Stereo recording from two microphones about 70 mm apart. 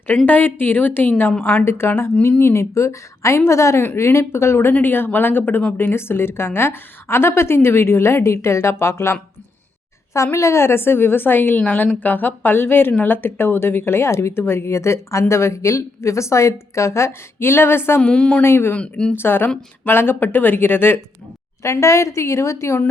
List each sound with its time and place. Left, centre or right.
0.3 s a woman's voice: left
10.3 s speech: left
18.0 s a woman's voice: centre
18.4 s speech: left
18.7 s a woman's voice: centre
19.1 s speech: left
21.6 s a woman's voice: left